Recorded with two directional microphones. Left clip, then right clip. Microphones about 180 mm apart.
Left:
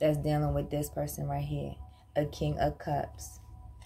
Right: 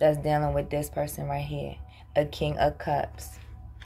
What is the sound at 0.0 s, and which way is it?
Speech, 30° left (ahead or behind).